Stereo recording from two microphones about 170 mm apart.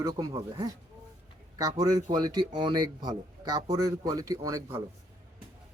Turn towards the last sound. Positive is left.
turn(degrees=-15)  # may be behind; listen again after turning